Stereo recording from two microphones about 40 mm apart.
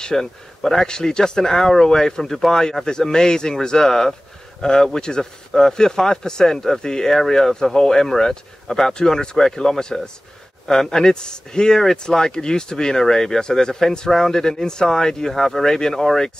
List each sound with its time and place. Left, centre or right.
0.0 s speech: centre